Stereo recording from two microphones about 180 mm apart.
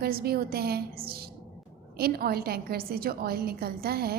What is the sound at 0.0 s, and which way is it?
A woman's voice, 60° right (ahead or behind).